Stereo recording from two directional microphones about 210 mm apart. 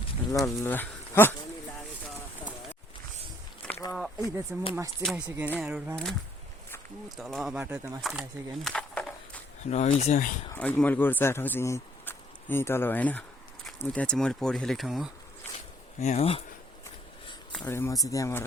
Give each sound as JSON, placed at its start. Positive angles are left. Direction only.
{"t": 0.4, "sound": "speech", "side_deg": 10}
{"t": 3.7, "sound": "a sound", "side_deg": 15}
{"t": 4.7, "sound": "speech", "side_deg": -15}
{"t": 7.2, "sound": "speech", "side_deg": 0}
{"t": 8.7, "sound": "a sound", "side_deg": 5}
{"t": 9.6, "sound": "speech", "side_deg": 35}
{"t": 10.5, "sound": "speech", "side_deg": 5}
{"t": 16.0, "sound": "speech", "side_deg": 30}
{"t": 17.6, "sound": "speech", "side_deg": 10}